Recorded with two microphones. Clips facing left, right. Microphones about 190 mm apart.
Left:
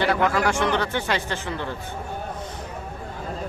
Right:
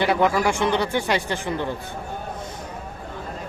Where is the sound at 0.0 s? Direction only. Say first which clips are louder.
Right 2 dB; 15° right (ahead or behind).